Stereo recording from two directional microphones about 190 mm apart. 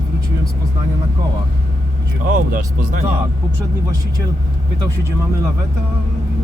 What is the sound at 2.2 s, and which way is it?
Speech, 45° right (ahead or behind).